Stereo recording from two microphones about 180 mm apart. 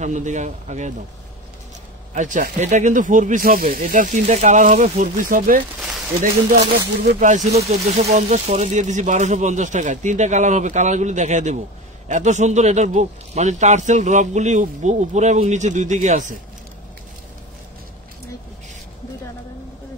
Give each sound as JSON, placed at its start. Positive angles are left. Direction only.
{"t": 0.0, "sound": "speech", "side_deg": -40}
{"t": 2.1, "sound": "speech", "side_deg": -45}
{"t": 7.2, "sound": "speech", "side_deg": -45}